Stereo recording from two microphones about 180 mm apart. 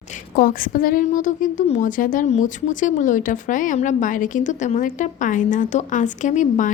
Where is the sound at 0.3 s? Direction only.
50° left (ahead or behind).